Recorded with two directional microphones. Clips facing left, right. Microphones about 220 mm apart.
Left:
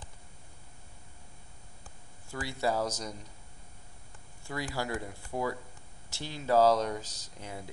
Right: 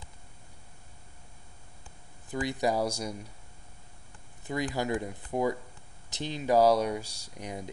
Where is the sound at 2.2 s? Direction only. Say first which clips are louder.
Right 3 dB; 20° right (ahead or behind).